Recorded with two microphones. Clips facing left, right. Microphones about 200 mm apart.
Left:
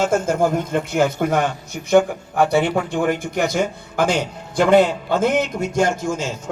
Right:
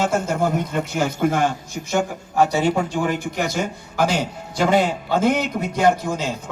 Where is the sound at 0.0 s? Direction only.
50° left (ahead or behind).